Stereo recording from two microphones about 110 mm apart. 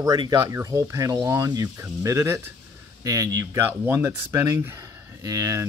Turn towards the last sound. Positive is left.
turn(degrees=-30)  # may be behind; listen again after turning